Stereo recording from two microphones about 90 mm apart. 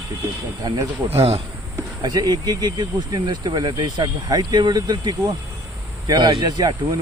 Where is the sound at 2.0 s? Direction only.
45° right (ahead or behind).